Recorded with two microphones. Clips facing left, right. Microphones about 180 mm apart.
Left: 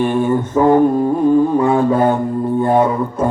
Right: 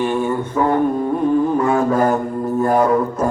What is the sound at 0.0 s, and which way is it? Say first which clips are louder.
Mantra: left 3 dB; 50° left (ahead or behind).